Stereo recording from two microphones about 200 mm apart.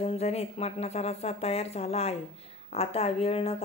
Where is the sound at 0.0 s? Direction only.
30° left (ahead or behind).